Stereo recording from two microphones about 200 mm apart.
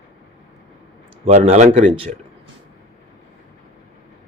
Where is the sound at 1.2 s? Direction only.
30° right (ahead or behind).